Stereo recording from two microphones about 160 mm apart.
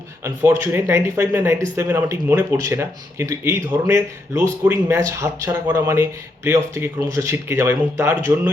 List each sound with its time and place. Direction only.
0.4 s speech: 15° right (ahead or behind)